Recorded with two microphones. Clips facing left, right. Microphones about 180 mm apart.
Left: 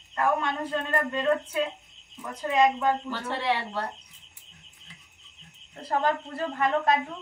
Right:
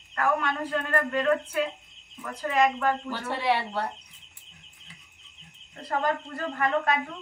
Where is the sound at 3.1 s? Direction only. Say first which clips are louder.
Right 1 dB; 10° right (ahead or behind).